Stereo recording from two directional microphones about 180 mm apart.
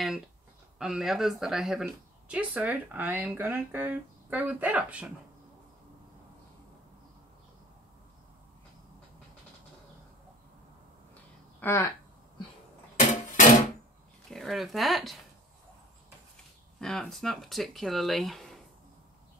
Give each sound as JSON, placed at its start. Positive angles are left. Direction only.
{"t": 0.7, "sound": "speech", "side_deg": -5}
{"t": 11.6, "sound": "speech", "side_deg": 15}
{"t": 13.0, "sound": "dishes", "side_deg": 45}
{"t": 14.3, "sound": "speech", "side_deg": 0}
{"t": 16.8, "sound": "speech", "side_deg": 0}